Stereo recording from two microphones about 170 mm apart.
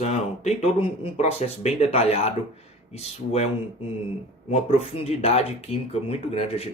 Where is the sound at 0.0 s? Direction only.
40° left (ahead or behind).